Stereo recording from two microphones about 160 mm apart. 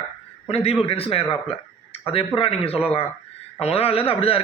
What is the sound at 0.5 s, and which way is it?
Speech, 40° left (ahead or behind).